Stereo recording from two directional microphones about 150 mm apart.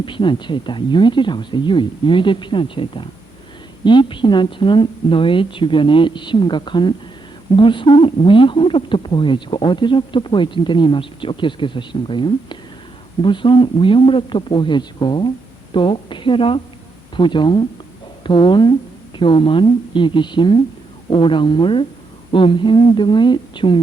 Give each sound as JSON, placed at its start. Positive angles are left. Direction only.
{"t": 0.0, "sound": "speech", "side_deg": 35}